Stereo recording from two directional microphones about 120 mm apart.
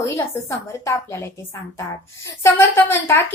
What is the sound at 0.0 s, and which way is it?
A woman's voice, 25° left (ahead or behind).